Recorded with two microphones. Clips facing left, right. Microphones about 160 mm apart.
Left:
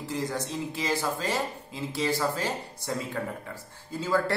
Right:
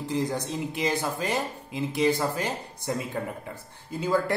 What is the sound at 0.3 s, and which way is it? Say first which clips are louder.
Speech: right 2 dB; 15° right (ahead or behind).